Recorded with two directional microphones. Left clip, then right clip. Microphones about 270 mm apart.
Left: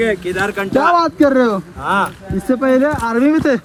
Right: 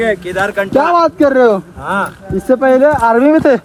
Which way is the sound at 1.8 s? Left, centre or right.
Left.